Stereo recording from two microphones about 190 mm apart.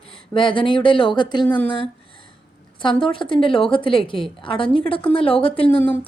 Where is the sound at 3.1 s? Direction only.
25° left (ahead or behind).